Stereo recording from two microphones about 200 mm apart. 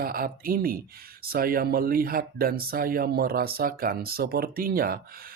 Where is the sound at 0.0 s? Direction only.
45° right (ahead or behind).